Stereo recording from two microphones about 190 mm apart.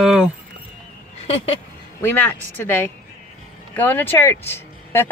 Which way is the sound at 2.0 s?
10° left (ahead or behind).